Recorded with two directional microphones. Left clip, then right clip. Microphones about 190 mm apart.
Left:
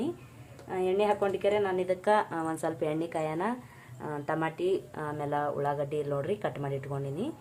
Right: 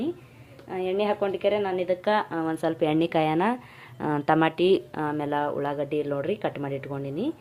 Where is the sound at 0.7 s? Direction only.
15° right (ahead or behind).